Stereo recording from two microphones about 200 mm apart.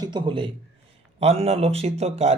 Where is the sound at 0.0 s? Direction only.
25° right (ahead or behind).